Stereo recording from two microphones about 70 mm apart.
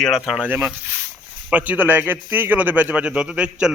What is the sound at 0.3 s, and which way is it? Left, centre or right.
Speech, centre.